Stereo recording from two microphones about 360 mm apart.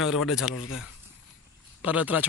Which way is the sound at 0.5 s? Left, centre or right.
Left.